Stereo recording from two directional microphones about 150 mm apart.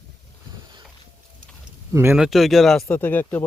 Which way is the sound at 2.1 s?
Centre (ahead or behind).